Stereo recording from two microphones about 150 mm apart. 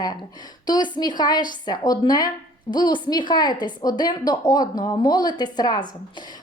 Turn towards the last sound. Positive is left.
turn(degrees=30)  # may be behind; listen again after turning